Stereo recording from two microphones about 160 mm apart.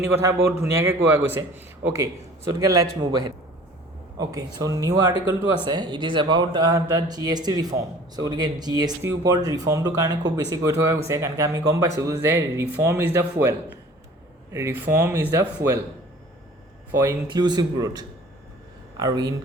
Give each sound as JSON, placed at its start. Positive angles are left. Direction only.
{"t": 0.0, "sound": "a man's voice", "side_deg": -20}
{"t": 2.9, "sound": "a man's voice", "side_deg": -30}
{"t": 17.0, "sound": "speech", "side_deg": -25}